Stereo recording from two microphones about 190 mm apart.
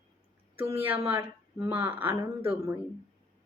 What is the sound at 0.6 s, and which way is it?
A woman's voice, 10° right (ahead or behind).